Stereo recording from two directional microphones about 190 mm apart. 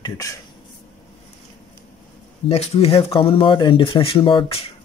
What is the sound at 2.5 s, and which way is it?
Speech, 30° left (ahead or behind).